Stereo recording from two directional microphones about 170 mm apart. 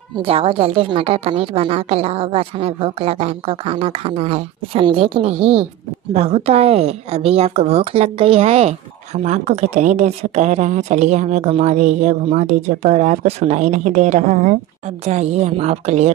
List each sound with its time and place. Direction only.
0.2 s a woman's voice: 35° right (ahead or behind)